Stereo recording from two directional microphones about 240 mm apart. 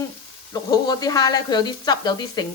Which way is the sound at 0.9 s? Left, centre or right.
Centre.